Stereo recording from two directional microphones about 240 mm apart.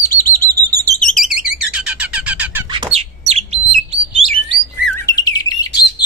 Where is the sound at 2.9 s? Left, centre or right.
Right.